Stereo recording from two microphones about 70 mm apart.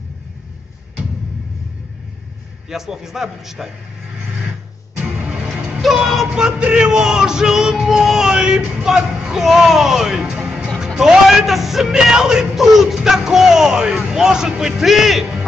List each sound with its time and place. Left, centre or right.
2.7 s a man's voice: centre
5.2 s music: centre
5.8 s music: centre
11.0 s speech: centre